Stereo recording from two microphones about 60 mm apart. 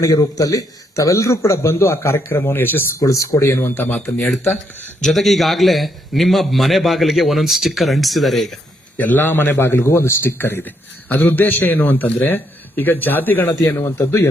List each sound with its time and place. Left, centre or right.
0.0 s a man's voice: left
3.0 s speech: left
3.5 s a man's voice: left
3.8 s speech: left
4.9 s a man's voice: centre
9.0 s a man's voice: left